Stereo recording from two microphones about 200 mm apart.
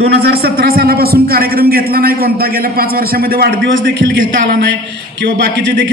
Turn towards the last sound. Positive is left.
turn(degrees=-55)  # may be behind; listen again after turning